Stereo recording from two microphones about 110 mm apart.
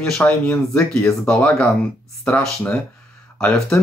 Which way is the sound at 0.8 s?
25° left (ahead or behind).